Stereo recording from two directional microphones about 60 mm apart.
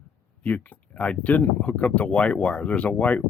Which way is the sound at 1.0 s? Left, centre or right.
Left.